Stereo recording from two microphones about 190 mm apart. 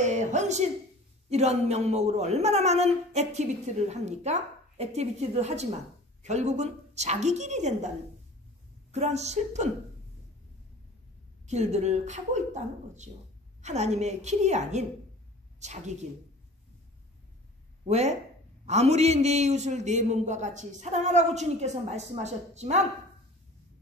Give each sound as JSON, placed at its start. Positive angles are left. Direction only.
{"t": 0.0, "sound": "a man's voice", "side_deg": -40}
{"t": 8.9, "sound": "a man's voice", "side_deg": -35}
{"t": 11.4, "sound": "a man's voice", "side_deg": -35}
{"t": 17.8, "sound": "a man's voice", "side_deg": -35}